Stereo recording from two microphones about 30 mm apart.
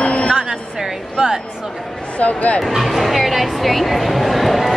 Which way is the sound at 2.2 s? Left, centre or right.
Left.